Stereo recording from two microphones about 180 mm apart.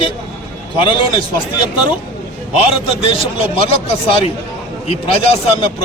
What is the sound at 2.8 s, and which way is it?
Speech, 30° left (ahead or behind).